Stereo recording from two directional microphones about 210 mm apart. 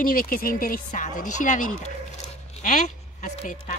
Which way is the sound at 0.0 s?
40° left (ahead or behind).